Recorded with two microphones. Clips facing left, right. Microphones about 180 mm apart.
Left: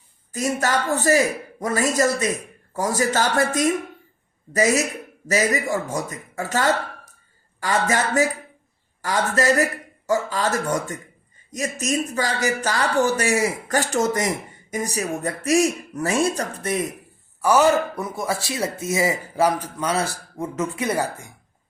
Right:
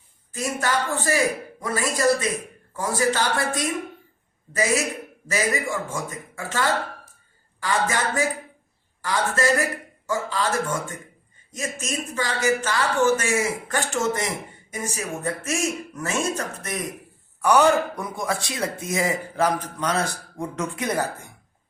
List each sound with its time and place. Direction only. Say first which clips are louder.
0.3 s a man's voice: left 3 dB; 40° left (ahead or behind)
17.4 s a man's voice: left 1 dB; 5° left (ahead or behind)